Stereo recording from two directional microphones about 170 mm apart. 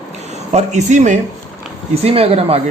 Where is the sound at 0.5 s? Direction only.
45° right (ahead or behind).